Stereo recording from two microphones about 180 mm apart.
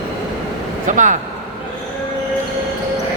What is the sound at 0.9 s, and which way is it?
Speech, 45° right (ahead or behind).